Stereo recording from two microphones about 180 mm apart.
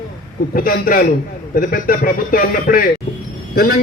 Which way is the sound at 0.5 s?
50° left (ahead or behind).